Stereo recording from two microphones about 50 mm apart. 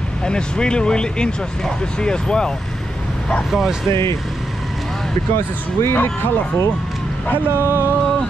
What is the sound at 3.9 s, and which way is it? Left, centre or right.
Speech, left.